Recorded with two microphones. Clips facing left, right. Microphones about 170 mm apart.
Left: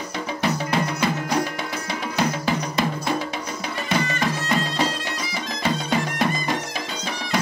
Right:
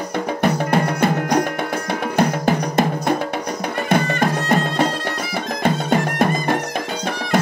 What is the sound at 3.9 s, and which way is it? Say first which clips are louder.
Bagpipes: right 5 dB; 55° right (ahead or behind).